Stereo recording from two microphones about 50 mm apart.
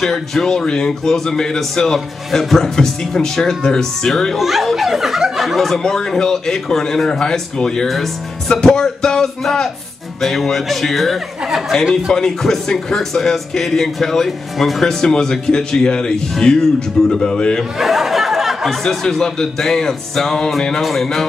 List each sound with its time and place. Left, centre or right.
0.0 s a man's voice: centre
17.7 s a sound: centre
18.9 s a man's voice: centre